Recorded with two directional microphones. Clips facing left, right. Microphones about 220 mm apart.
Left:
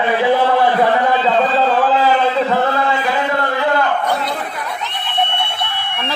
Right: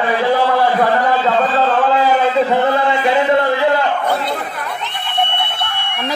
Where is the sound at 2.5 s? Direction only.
15° right (ahead or behind).